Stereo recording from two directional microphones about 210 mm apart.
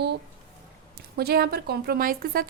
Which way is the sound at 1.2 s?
50° right (ahead or behind).